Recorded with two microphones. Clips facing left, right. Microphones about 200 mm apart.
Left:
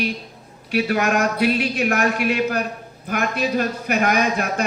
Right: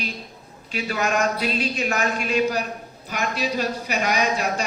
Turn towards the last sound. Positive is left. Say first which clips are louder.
# left 2 dB
turn(degrees=55)  # may be behind; listen again after turning